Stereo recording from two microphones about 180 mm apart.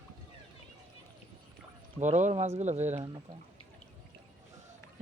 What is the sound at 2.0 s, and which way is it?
Speech, 40° right (ahead or behind).